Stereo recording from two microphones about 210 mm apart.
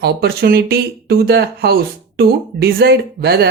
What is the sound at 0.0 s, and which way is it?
Speech, 50° right (ahead or behind).